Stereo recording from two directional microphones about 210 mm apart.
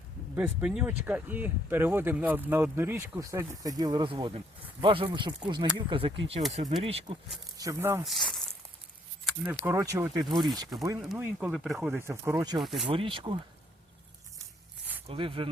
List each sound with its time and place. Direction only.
0.3 s speech: 5° right (ahead or behind); by 7.2 s 25° right (ahead or behind)
7.5 s speech: 15° right (ahead or behind)
8.0 s speech: centre (ahead or behind)
9.2 s a sound: 5° right (ahead or behind)
9.6 s speech: 15° right (ahead or behind)
11.1 s speech: 5° right (ahead or behind)
12.6 s speech: centre (ahead or behind)
12.9 s speech: 25° right (ahead or behind)
15.0 s speech: 25° right (ahead or behind)